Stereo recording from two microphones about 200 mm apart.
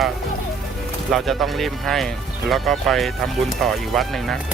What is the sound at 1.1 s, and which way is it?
Speech, centre (ahead or behind).